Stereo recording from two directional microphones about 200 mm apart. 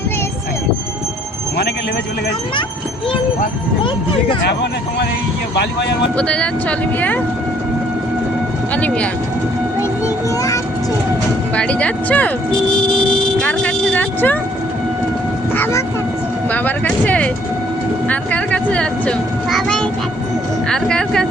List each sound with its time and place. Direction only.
4.4 s speech: 60° left (ahead or behind)
6.1 s a child's voice: 5° left (ahead or behind)
8.7 s speech: 5° left (ahead or behind)
10.2 s speech: 15° left (ahead or behind)
11.5 s speech: 5° left (ahead or behind)
13.1 s vehicle: 5° left (ahead or behind)
15.5 s a child's voice: 10° left (ahead or behind)